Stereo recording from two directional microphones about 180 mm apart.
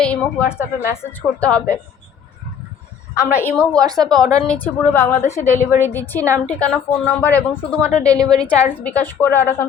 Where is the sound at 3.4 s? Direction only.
10° left (ahead or behind).